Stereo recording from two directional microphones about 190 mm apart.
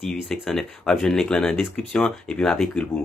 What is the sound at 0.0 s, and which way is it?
Speech, centre (ahead or behind).